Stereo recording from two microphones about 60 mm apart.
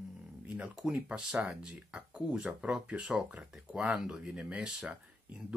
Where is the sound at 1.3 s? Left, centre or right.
Centre.